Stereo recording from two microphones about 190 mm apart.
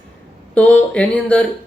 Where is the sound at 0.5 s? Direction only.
5° left (ahead or behind).